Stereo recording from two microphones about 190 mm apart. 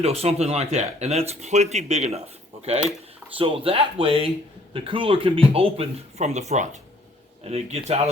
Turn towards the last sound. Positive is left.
turn(degrees=-35)  # may be behind; listen again after turning